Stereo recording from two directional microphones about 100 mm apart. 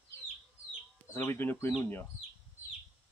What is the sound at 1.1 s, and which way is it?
Speech, 20° left (ahead or behind).